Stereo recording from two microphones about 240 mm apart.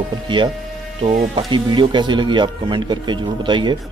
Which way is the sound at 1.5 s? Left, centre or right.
Centre.